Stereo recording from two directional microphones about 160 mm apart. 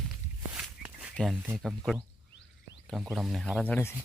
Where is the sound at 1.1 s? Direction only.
Centre (ahead or behind).